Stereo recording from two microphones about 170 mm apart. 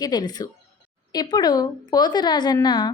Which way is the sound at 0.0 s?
25° left (ahead or behind).